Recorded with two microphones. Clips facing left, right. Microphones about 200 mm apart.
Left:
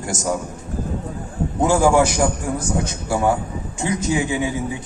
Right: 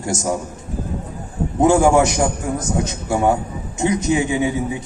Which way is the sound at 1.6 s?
20° right (ahead or behind).